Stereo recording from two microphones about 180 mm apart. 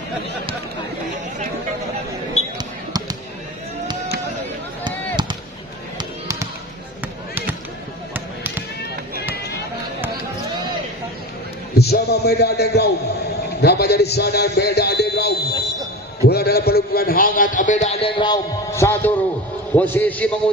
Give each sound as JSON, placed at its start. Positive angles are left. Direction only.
{"t": 4.8, "sound": "fireworks", "side_deg": -25}
{"t": 5.9, "sound": "basketball bounce", "side_deg": -20}
{"t": 8.1, "sound": "basketball bounce", "side_deg": -10}
{"t": 11.7, "sound": "a man's voice", "side_deg": 65}